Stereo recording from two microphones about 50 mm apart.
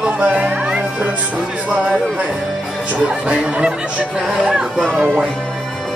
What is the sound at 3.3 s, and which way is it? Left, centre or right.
Music, centre.